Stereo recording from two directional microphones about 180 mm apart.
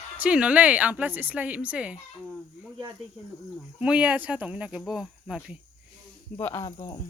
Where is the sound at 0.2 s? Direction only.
5° right (ahead or behind).